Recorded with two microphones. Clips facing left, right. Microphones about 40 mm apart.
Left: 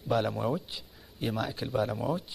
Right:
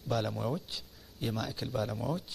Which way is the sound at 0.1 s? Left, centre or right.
Centre.